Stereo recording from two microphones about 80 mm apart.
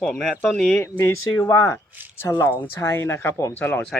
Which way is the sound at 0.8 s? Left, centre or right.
Left.